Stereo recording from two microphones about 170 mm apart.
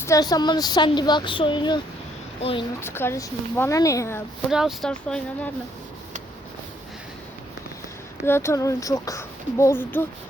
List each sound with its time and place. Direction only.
0.0 s speech: 20° left (ahead or behind)
2.8 s speech: 15° left (ahead or behind)
4.5 s speech: centre (ahead or behind)
8.2 s speech: 15° left (ahead or behind)